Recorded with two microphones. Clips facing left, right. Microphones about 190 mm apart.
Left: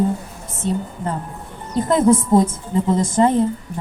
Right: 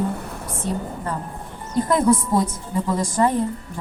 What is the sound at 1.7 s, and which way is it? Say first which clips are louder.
A woman's voice: left 3 dB; 25° left (ahead or behind).